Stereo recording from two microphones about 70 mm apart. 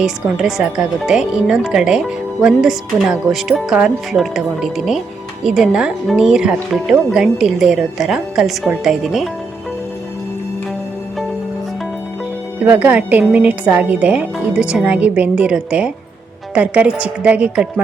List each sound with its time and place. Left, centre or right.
0.3 s a woman's voice: centre
12.6 s speech: right